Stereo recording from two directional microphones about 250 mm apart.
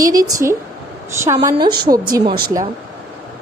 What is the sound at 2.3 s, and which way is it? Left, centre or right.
Speech, right.